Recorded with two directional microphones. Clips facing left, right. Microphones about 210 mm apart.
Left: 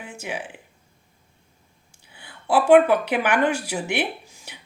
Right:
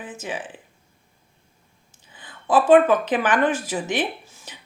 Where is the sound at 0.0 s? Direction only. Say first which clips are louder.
Right 1 dB; 10° left (ahead or behind).